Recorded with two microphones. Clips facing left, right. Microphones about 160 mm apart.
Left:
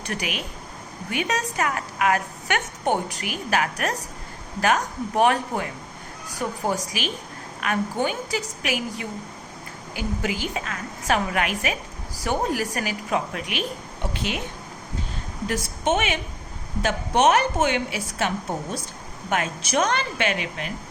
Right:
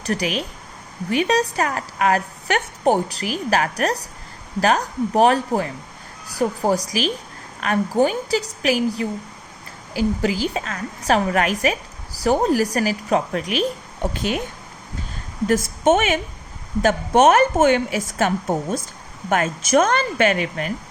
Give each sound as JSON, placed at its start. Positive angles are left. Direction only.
{"t": 0.0, "sound": "a woman's voice", "side_deg": -35}
{"t": 15.4, "sound": "a woman's voice", "side_deg": -45}
{"t": 19.3, "sound": "a woman's voice", "side_deg": -50}